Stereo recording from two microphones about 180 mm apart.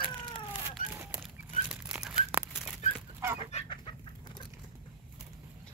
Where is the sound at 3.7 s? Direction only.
25° left (ahead or behind).